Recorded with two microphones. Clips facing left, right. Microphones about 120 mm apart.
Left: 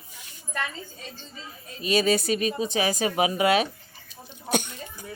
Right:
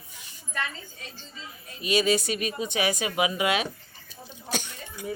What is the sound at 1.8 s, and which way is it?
Speech, 40° left (ahead or behind).